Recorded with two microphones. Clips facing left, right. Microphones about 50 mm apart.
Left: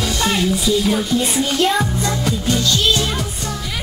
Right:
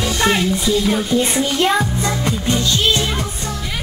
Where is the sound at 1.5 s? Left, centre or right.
Centre.